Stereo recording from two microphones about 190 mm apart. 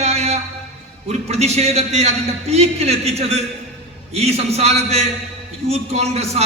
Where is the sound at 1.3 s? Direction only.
35° right (ahead or behind).